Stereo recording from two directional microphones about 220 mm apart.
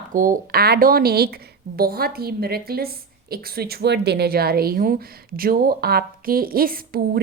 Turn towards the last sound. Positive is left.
turn(degrees=-40)  # may be behind; listen again after turning